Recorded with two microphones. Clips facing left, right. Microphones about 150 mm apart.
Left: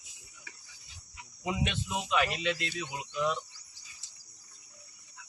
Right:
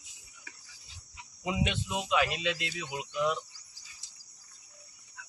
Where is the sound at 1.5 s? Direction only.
15° right (ahead or behind).